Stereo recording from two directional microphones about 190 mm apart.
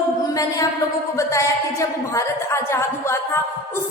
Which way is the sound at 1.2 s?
15° left (ahead or behind).